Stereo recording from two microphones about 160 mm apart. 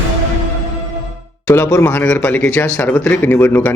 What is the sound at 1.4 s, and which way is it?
Speech, 15° left (ahead or behind).